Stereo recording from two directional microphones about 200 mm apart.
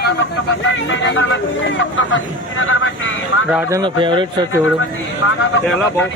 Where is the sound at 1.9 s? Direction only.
70° left (ahead or behind).